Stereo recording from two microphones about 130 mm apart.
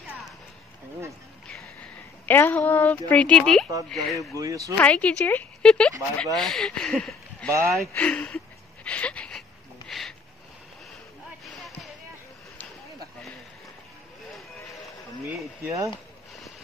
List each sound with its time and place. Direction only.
1.5 s a woman's voice: 10° left (ahead or behind)
4.4 s speech: 25° right (ahead or behind)
4.7 s speech: 10° left (ahead or behind)
8.8 s a sound: 10° left (ahead or behind)
11.4 s basketball bounce: centre (ahead or behind)
15.6 s speech: 25° right (ahead or behind)